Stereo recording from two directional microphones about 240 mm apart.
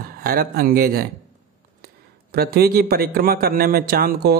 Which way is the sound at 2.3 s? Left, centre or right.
Right.